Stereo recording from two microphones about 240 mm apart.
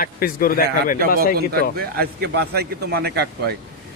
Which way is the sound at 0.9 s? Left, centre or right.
Right.